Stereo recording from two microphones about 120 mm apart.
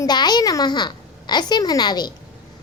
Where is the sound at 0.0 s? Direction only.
35° left (ahead or behind).